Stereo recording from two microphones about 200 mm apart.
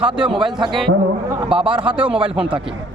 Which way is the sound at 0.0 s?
5° right (ahead or behind).